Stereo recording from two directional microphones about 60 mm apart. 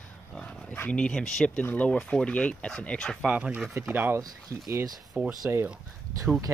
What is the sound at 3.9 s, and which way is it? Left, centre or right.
Speech, right.